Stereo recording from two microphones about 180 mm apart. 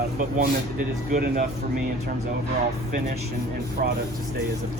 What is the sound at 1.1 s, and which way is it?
Speech, 50° right (ahead or behind).